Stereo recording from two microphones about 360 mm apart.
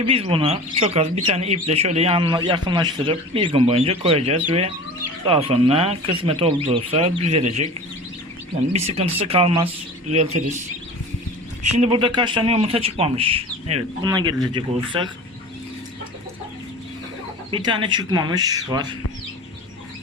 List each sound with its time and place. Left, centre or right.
0.0 s speech: centre
8.7 s speech: centre
11.8 s speech: centre
17.5 s speech: centre